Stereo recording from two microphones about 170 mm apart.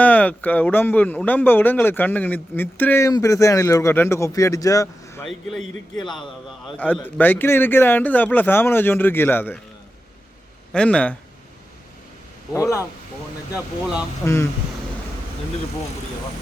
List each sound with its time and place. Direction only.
0.0 s a man's voice: 10° left (ahead or behind); by 6.2 s 25° left (ahead or behind)
6.7 s speech: 10° left (ahead or behind)
10.7 s a man's voice: 5° left (ahead or behind)
13.5 s speech: 5° right (ahead or behind)
14.2 s a man's voice: 20° left (ahead or behind)